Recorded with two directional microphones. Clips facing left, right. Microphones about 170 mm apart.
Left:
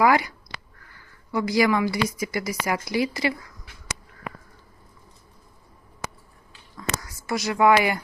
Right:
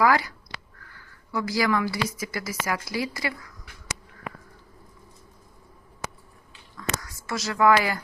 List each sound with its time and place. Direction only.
0.0 s a woman's voice: 20° left (ahead or behind)
7.3 s speech: 20° left (ahead or behind)